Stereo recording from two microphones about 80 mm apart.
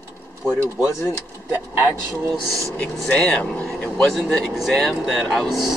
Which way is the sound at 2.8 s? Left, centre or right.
Centre.